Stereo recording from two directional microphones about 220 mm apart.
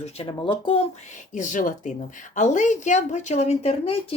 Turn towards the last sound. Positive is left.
turn(degrees=30)  # may be behind; listen again after turning